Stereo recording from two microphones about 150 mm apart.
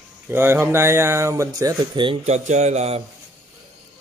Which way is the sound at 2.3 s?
50° right (ahead or behind).